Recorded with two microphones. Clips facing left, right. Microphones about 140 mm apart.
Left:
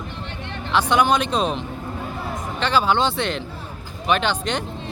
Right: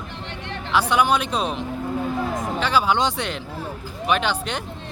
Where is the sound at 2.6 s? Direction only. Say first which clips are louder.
Left 2 dB; 10° right (ahead or behind).